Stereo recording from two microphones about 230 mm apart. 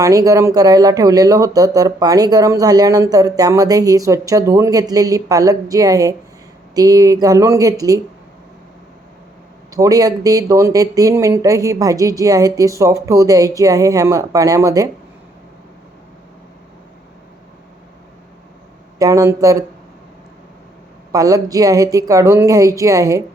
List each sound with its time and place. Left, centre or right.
0.0 s speech: centre
9.7 s speech: centre
18.9 s speech: centre
21.1 s speech: centre